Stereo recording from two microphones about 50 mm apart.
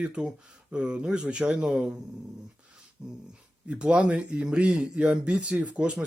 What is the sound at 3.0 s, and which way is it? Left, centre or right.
Dog, centre.